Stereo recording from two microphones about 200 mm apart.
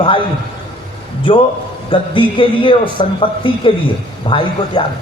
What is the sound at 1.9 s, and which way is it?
A man's voice, 25° left (ahead or behind).